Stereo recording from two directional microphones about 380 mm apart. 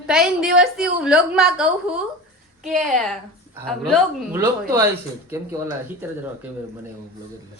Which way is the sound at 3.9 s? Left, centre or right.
Centre.